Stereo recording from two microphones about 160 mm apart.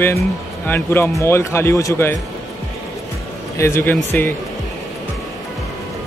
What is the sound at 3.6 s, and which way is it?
Speech, 15° left (ahead or behind).